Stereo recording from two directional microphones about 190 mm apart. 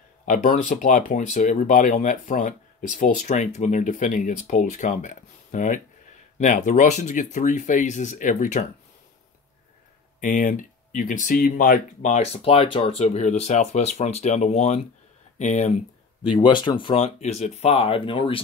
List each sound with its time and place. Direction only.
0.2 s speech: 40° left (ahead or behind)
10.2 s speech: 45° left (ahead or behind)
16.3 s speech: 25° left (ahead or behind)